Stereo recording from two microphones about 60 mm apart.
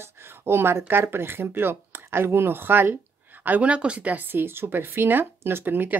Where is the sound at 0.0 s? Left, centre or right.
Right.